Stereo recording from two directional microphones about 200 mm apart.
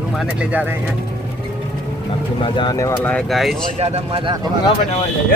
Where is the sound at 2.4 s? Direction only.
25° left (ahead or behind); by 3.5 s centre (ahead or behind).